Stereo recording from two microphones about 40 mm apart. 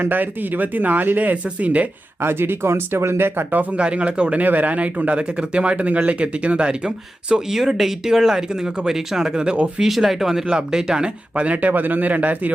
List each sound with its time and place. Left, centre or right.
0.1 s speech: right
2.2 s speech: right
3.8 s speech: right
7.5 s speech: centre; by 9.8 s right
9.8 s speech: centre; by 11.4 s right
11.4 s speech: right
11.7 s speech: right